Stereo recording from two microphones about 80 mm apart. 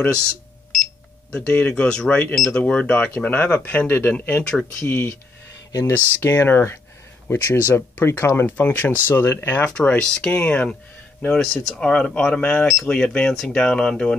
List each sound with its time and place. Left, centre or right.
1.3 s speech: centre
4.5 s speech: centre
4.8 s speech: left
9.0 s speech: left
9.7 s speech: centre